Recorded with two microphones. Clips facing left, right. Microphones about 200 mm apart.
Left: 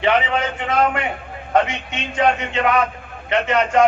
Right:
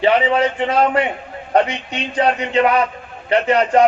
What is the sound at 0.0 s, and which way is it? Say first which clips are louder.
A man's voice: right 4 dB; 35° right (ahead or behind).